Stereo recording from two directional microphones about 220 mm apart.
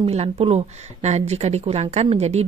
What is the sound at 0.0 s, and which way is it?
Speech, 25° right (ahead or behind).